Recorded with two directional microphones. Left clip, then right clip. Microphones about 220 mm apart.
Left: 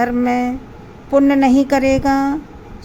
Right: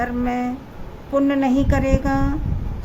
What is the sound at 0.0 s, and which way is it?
A woman's voice, 20° left (ahead or behind).